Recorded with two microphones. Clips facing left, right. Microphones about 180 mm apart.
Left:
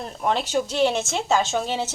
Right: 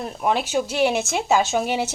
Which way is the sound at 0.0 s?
10° right (ahead or behind).